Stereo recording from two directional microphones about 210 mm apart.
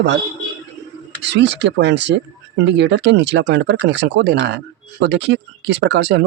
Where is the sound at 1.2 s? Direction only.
55° right (ahead or behind).